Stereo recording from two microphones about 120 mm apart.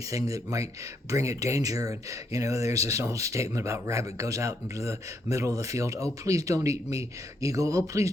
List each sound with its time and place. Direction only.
0.1 s speech: 30° right (ahead or behind)